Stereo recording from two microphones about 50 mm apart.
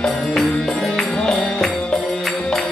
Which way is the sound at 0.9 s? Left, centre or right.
Centre.